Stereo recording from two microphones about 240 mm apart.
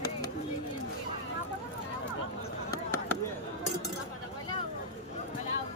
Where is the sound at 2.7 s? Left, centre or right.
Centre.